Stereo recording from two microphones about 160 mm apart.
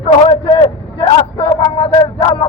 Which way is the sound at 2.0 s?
30° left (ahead or behind).